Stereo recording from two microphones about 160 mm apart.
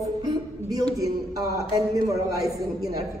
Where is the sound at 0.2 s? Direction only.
25° right (ahead or behind).